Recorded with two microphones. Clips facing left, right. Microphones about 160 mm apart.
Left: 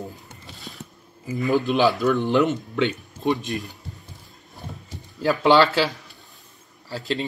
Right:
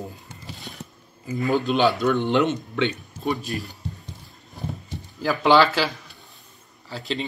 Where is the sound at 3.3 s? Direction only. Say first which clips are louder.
Left 3 dB; 20° left (ahead or behind).